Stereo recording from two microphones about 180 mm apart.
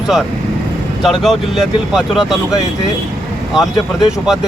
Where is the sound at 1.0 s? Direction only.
Centre (ahead or behind).